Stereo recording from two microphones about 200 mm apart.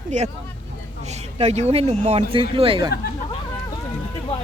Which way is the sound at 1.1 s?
35° right (ahead or behind).